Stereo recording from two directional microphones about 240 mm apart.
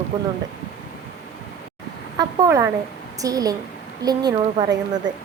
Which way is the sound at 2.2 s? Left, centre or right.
Centre.